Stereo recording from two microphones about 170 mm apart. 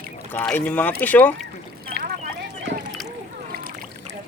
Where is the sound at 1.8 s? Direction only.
60° right (ahead or behind).